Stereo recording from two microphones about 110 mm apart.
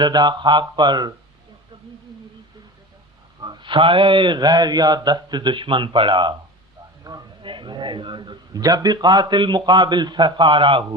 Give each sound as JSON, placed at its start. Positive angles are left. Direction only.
{"t": 0.0, "sound": "speech", "side_deg": -40}
{"t": 3.4, "sound": "a man's voice", "side_deg": -45}
{"t": 7.1, "sound": "speech", "side_deg": -35}
{"t": 7.4, "sound": "a man's voice", "side_deg": -45}